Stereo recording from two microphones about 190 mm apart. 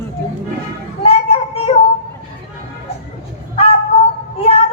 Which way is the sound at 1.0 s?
30° left (ahead or behind).